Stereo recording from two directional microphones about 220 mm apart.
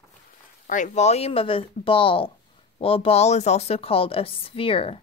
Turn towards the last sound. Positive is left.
turn(degrees=25)  # may be behind; listen again after turning